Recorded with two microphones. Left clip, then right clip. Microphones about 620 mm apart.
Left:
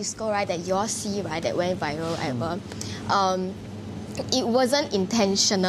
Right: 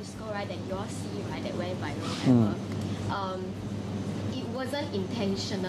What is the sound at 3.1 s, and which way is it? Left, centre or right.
Speech, left.